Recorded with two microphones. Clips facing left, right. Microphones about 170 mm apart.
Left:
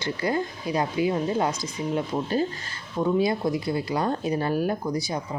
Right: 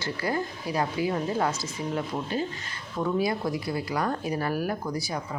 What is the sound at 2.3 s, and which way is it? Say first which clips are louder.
Speech: left 4 dB; 40° left (ahead or behind).